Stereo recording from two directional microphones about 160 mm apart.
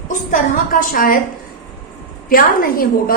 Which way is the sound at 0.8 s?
60° left (ahead or behind).